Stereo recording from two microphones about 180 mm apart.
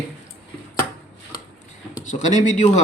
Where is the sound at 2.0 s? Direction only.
45° left (ahead or behind).